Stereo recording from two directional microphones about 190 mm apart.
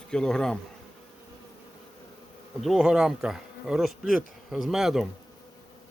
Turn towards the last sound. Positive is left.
turn(degrees=0)  # may be behind; listen again after turning